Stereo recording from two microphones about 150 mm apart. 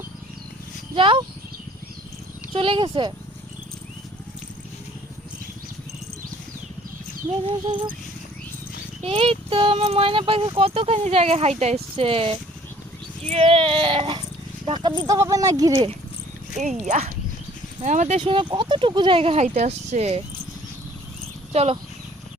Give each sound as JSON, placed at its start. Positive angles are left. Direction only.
{"t": 0.9, "sound": "speech", "side_deg": -35}
{"t": 2.5, "sound": "speech", "side_deg": -35}
{"t": 7.4, "sound": "speech", "side_deg": -35}
{"t": 9.0, "sound": "speech", "side_deg": -40}
{"t": 16.6, "sound": "speech", "side_deg": -55}
{"t": 18.2, "sound": "speech", "side_deg": -35}
{"t": 21.5, "sound": "speech", "side_deg": -45}